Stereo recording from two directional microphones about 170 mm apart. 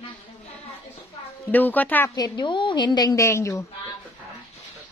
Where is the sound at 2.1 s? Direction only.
25° left (ahead or behind).